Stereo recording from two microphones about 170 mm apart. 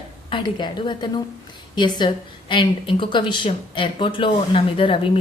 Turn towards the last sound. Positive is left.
turn(degrees=30)  # may be behind; listen again after turning